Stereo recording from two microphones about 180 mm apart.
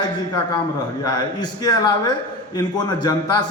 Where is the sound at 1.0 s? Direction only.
20° left (ahead or behind).